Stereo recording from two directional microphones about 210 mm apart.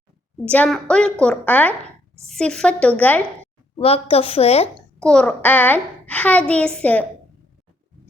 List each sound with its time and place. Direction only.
0.4 s a woman's voice: 5° left (ahead or behind)
3.8 s a woman's voice: 30° left (ahead or behind)
5.0 s a child's voice: 5° left (ahead or behind)